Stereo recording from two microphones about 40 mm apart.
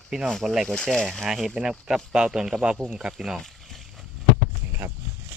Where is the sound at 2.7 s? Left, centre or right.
Right.